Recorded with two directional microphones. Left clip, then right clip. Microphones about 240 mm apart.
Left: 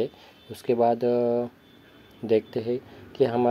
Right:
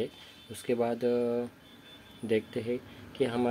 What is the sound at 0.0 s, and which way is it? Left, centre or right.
Speech, centre.